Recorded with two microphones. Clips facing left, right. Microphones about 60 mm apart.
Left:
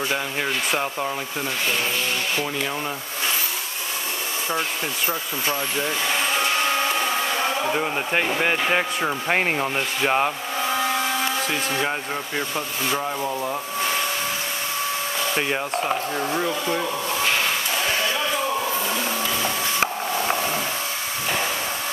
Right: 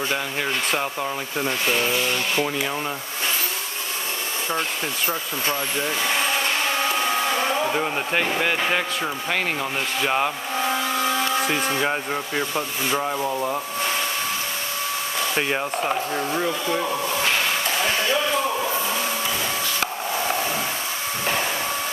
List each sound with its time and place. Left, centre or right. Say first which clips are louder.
0.7 s speech: even; centre
4.5 s speech: even; centre
7.7 s speech: even; centre
9.3 s speech: left 3 dB; left
10.0 s speech: left 2 dB; centre
11.4 s speech: right 2 dB; centre
15.3 s speech: right 1 dB; centre